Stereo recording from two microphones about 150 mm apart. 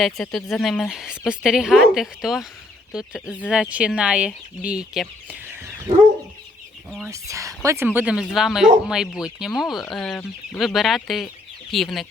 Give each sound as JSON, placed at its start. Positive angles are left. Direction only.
{"t": 0.0, "sound": "speech", "side_deg": 0}
{"t": 7.1, "sound": "speech", "side_deg": -20}